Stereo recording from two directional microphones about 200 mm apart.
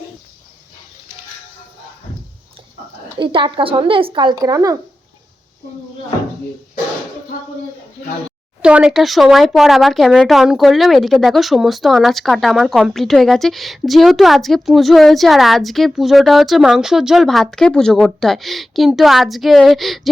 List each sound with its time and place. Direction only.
3.2 s speech: 25° right (ahead or behind)
8.6 s speech: 5° right (ahead or behind)